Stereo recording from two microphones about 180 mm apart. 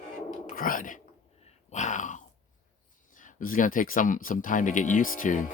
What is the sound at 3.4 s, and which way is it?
Speech, 50° left (ahead or behind).